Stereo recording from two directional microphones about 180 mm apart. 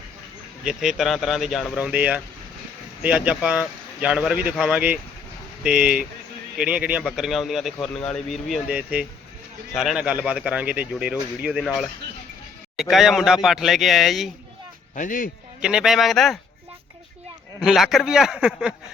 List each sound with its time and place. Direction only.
0.6 s speech: centre (ahead or behind)
14.9 s speech: 45° left (ahead or behind)
15.6 s speech: 5° right (ahead or behind)
17.6 s speech: centre (ahead or behind)